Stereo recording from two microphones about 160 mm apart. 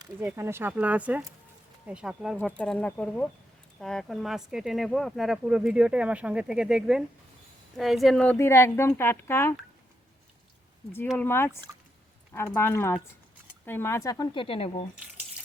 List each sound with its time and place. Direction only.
0.3 s speech: 15° right (ahead or behind)
2.4 s speech: 5° left (ahead or behind)
8.4 s speech: 15° left (ahead or behind)
11.2 s speech: 15° left (ahead or behind)
14.4 s speech: 35° left (ahead or behind)